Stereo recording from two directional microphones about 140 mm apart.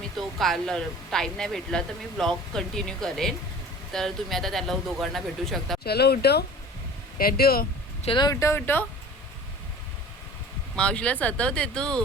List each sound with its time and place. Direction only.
0.2 s speech: centre (ahead or behind)
7.2 s speech: 90° left
8.0 s speech: 35° left (ahead or behind); by 8.8 s 15° left (ahead or behind)
10.8 s speech: 10° left (ahead or behind)